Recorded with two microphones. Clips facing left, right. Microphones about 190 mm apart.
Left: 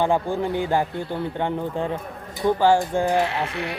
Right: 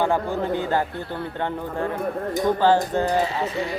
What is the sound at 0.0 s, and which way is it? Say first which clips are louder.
Speech: left 1 dB; 15° left (ahead or behind).